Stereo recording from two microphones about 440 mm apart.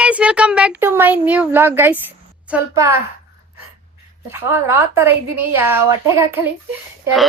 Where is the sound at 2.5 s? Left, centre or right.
Centre.